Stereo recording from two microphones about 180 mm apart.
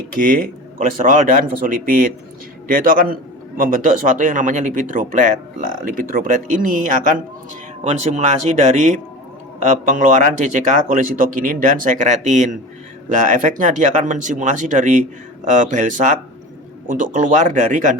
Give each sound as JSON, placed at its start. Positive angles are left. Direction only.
{"t": 0.2, "sound": "speech", "side_deg": -50}